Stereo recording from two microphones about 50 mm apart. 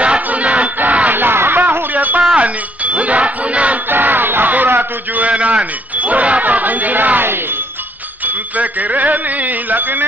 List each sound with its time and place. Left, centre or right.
0.0 s battle cry: right
1.1 s a sound: right
2.0 s a sound: right
2.4 s speech: right
3.9 s crowd: right
5.2 s speech: right